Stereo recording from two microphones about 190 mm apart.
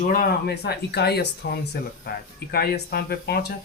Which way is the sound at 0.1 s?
50° left (ahead or behind).